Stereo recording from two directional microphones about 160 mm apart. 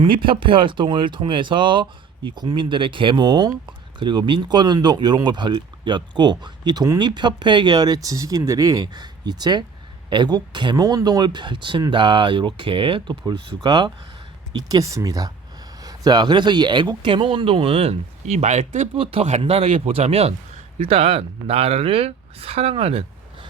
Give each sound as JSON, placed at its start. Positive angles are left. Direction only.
{"t": 0.0, "sound": "speech", "side_deg": -30}
{"t": 18.9, "sound": "speech", "side_deg": -40}